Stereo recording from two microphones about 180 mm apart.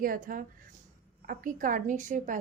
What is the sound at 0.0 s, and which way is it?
A woman's voice, 50° right (ahead or behind).